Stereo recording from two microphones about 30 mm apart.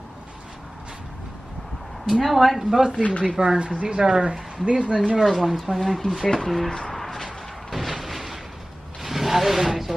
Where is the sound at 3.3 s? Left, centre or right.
Right.